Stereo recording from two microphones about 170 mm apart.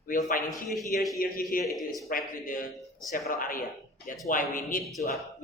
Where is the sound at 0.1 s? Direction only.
50° left (ahead or behind).